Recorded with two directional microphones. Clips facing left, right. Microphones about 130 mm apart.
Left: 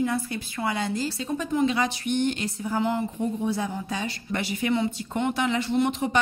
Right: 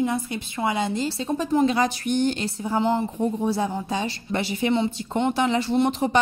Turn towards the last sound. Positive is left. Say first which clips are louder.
# right 3 dB
turn(degrees=-35)  # may be behind; listen again after turning